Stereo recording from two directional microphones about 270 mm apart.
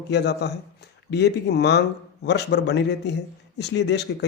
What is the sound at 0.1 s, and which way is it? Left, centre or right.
Speech, left.